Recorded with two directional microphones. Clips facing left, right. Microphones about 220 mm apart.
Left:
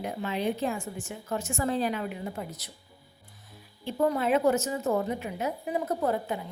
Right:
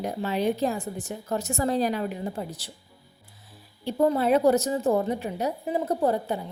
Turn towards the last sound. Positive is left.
turn(degrees=-30)  # may be behind; listen again after turning